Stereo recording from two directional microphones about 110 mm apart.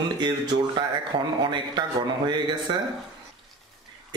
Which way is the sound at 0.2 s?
40° right (ahead or behind).